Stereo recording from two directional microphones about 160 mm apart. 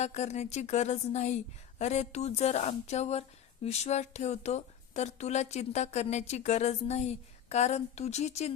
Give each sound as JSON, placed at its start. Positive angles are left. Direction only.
{"t": 0.0, "sound": "speech", "side_deg": 45}